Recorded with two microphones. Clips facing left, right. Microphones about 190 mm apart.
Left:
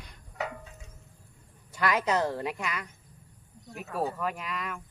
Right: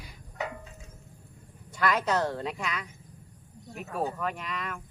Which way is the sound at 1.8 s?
10° left (ahead or behind).